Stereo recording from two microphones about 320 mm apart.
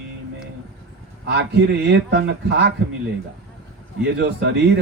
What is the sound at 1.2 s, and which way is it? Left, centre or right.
Mantra, right.